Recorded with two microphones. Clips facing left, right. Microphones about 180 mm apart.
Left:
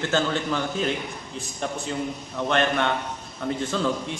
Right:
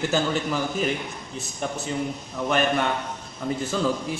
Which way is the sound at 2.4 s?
5° right (ahead or behind).